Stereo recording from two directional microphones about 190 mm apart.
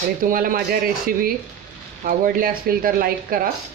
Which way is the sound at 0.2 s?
45° right (ahead or behind).